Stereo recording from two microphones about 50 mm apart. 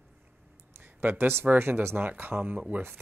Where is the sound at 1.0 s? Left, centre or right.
Right.